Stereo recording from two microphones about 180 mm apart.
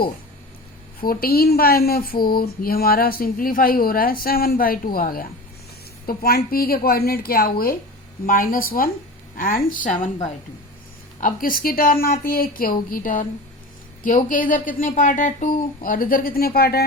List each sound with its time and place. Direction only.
1.0 s speech: 55° left (ahead or behind)
11.2 s speech: 50° left (ahead or behind)